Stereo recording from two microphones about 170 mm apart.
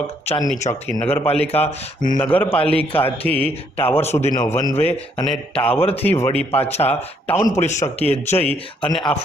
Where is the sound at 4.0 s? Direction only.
40° left (ahead or behind).